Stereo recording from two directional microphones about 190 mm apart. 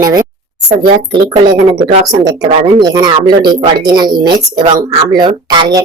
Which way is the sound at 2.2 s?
20° right (ahead or behind).